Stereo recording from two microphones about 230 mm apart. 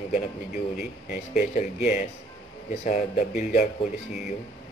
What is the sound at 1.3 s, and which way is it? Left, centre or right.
Speech, left.